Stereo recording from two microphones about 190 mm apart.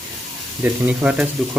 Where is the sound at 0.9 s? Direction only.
5° right (ahead or behind).